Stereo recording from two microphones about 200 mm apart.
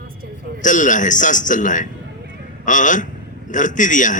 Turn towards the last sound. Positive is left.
turn(degrees=40)  # may be behind; listen again after turning